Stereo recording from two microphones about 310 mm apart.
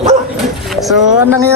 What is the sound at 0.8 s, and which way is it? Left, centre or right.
Speech, centre.